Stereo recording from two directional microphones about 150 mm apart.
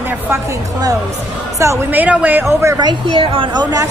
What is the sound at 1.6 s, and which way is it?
A woman's voice, 15° right (ahead or behind).